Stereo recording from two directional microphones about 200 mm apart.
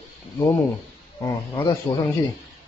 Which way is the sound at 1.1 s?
15° left (ahead or behind).